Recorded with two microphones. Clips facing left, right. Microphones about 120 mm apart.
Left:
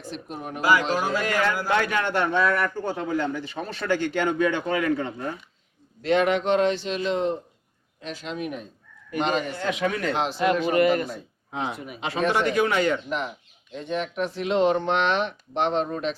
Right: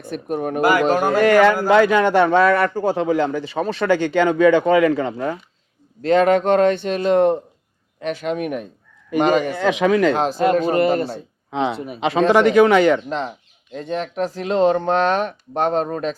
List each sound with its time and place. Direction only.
0.0 s a man's voice: 55° right (ahead or behind); by 1.5 s 75° right (ahead or behind)
2.0 s speech: 90° right
6.0 s a man's voice: 40° right (ahead or behind); by 8.6 s 60° right (ahead or behind)
9.4 s speech: 75° right (ahead or behind); by 10.2 s 90° right
10.2 s speech: 45° right (ahead or behind)
11.5 s speech: 75° right (ahead or behind)
12.3 s speech: 90° right
13.1 s speech: 35° right (ahead or behind)